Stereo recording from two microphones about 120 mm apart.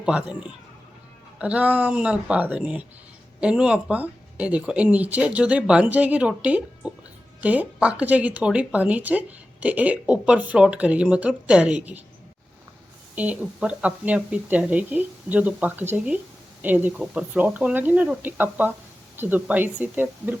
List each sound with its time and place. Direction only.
0.0 s a woman's voice: 5° right (ahead or behind)
13.1 s a woman's voice: 10° right (ahead or behind)